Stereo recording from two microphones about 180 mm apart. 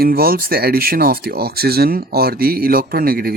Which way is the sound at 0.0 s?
55° right (ahead or behind).